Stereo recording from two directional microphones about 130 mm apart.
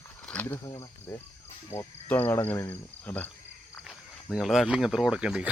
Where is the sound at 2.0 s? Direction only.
15° left (ahead or behind).